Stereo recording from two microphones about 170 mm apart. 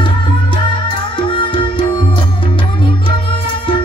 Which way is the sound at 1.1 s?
30° left (ahead or behind).